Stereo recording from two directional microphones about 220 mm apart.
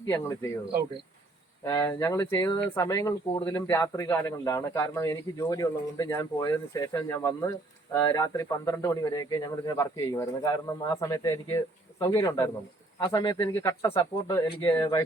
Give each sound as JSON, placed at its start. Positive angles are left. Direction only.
{"t": 1.6, "sound": "speech", "side_deg": 15}